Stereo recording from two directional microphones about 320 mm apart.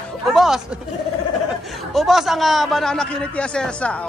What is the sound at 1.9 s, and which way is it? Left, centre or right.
A man's voice, centre.